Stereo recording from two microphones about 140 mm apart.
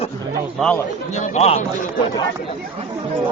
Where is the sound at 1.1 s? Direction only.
55° left (ahead or behind).